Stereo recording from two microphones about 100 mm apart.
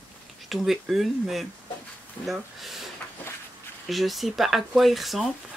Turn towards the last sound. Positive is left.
turn(degrees=0)  # may be behind; listen again after turning